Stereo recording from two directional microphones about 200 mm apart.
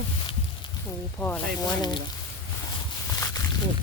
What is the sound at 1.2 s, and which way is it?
Speech, 5° left (ahead or behind).